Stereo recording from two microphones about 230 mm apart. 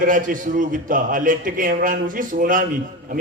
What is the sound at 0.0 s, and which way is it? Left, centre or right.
Speech, right.